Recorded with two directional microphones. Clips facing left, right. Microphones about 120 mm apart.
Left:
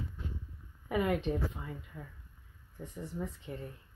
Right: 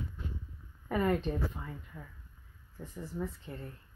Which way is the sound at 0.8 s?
10° left (ahead or behind).